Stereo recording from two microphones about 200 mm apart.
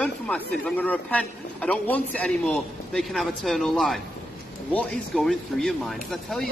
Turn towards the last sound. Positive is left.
turn(degrees=0)  # may be behind; listen again after turning